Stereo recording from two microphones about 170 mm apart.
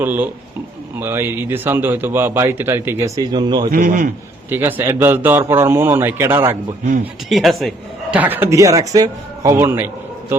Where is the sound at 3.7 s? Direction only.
55° right (ahead or behind).